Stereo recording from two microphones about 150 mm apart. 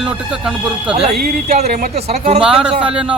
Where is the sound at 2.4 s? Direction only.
5° right (ahead or behind).